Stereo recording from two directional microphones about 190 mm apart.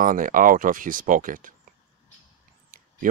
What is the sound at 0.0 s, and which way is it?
Speech, 45° right (ahead or behind).